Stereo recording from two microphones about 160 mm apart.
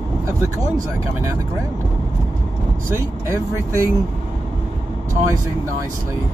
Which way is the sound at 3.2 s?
15° right (ahead or behind).